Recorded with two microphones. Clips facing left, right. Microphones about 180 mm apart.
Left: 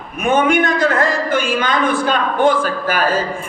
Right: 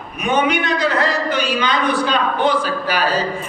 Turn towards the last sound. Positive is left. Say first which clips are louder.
# left 2 dB
turn(degrees=50)  # may be behind; listen again after turning